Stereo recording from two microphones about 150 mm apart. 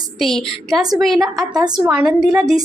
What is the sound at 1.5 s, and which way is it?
Speech, 25° right (ahead or behind).